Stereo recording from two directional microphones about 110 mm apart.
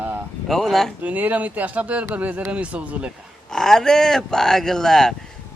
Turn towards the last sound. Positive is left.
turn(degrees=5)  # may be behind; listen again after turning